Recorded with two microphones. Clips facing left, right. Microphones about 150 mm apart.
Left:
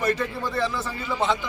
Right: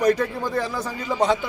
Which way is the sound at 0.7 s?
40° right (ahead or behind).